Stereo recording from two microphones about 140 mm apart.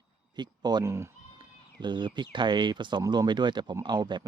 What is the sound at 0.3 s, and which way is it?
Speech, 30° right (ahead or behind).